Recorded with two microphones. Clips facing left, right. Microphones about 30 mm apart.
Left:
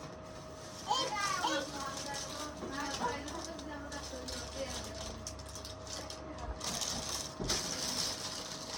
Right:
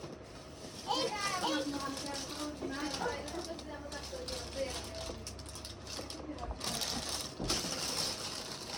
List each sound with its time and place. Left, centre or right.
0.9 s children playing: right
1.6 s a sound: right
4.6 s vehicle: right
6.6 s sewing machine: right